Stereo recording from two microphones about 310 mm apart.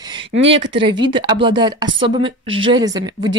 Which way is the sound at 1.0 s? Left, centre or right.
Centre.